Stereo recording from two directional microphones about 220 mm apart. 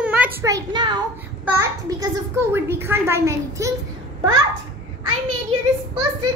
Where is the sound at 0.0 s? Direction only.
5° right (ahead or behind).